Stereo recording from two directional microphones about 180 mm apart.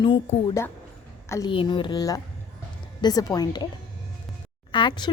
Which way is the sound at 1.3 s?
25° left (ahead or behind).